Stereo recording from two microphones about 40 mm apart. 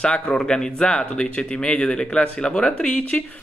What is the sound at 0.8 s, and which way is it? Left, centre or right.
A man's voice, left.